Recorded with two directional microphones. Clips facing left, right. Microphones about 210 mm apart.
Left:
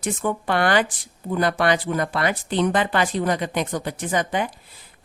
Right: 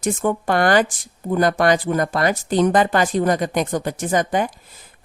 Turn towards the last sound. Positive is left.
turn(degrees=-45)  # may be behind; listen again after turning